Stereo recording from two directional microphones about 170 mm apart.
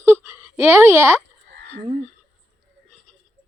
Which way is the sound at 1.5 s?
90° right.